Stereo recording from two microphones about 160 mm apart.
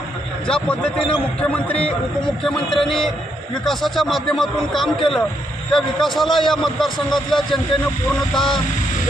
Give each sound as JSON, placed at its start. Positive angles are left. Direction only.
{"t": 0.4, "sound": "a man's voice", "side_deg": 5}